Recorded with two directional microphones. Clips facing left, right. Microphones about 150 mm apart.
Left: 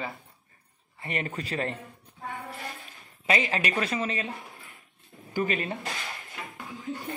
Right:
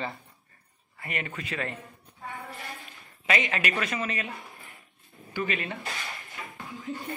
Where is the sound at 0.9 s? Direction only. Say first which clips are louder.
Left 3 dB; 30° left (ahead or behind).